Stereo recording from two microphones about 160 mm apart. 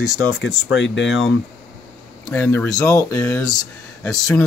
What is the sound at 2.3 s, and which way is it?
Speech, 10° left (ahead or behind).